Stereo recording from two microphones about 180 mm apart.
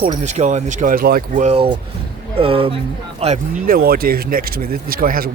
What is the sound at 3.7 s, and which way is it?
Speech, 55° right (ahead or behind).